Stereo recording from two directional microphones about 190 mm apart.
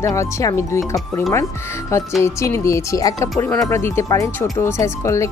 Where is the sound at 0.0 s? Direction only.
15° left (ahead or behind).